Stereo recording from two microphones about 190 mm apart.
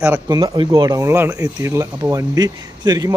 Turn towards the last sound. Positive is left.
turn(degrees=-20)  # may be behind; listen again after turning